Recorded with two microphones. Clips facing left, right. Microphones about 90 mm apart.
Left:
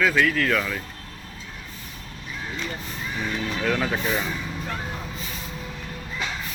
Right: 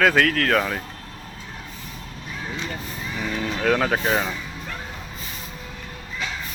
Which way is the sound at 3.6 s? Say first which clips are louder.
Right 5 dB; 50° right (ahead or behind).